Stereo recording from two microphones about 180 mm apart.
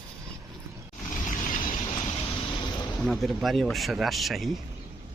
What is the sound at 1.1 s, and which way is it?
Vehicle, 45° left (ahead or behind).